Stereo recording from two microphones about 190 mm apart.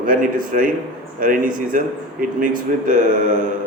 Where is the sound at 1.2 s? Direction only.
45° right (ahead or behind).